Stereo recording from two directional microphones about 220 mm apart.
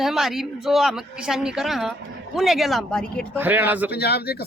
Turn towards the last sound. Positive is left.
turn(degrees=45)  # may be behind; listen again after turning